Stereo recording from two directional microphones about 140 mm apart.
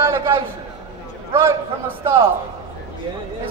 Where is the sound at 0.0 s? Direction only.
20° right (ahead or behind).